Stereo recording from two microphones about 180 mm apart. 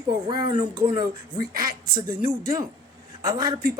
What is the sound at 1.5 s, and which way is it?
Speech, 55° right (ahead or behind).